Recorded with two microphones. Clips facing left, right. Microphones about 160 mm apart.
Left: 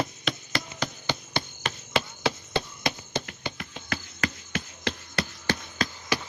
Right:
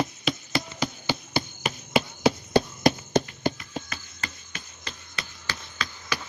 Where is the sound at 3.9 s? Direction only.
75° left (ahead or behind).